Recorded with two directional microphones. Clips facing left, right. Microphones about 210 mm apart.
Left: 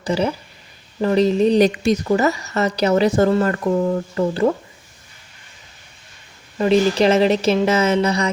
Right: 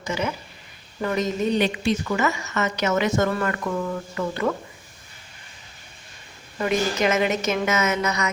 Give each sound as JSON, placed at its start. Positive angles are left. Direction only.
{"t": 0.0, "sound": "a woman's voice", "side_deg": 35}
{"t": 6.6, "sound": "a woman's voice", "side_deg": 30}